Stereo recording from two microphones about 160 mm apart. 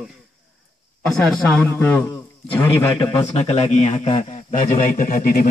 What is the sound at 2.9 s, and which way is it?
A man's voice, 30° left (ahead or behind).